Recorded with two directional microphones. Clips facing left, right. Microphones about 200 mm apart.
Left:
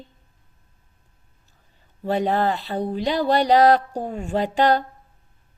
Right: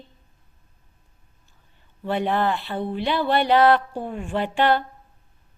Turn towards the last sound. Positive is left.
turn(degrees=40)  # may be behind; listen again after turning